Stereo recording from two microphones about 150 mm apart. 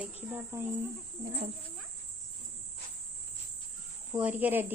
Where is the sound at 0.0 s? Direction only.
10° right (ahead or behind).